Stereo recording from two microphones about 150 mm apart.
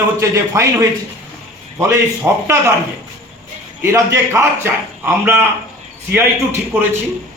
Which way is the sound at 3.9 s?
20° right (ahead or behind).